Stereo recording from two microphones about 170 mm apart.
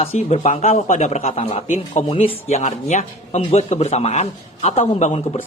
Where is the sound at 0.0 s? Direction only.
40° left (ahead or behind).